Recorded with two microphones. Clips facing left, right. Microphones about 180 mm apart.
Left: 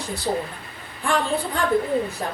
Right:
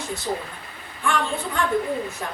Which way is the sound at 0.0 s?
35° left (ahead or behind).